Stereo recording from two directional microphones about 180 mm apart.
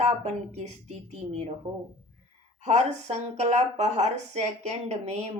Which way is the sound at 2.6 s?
35° right (ahead or behind).